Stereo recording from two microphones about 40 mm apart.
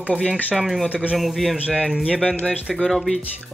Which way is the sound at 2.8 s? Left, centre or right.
Centre.